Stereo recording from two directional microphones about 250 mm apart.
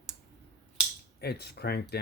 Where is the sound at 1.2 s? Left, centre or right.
Left.